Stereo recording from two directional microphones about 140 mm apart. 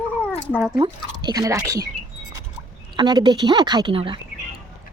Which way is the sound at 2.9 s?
30° right (ahead or behind).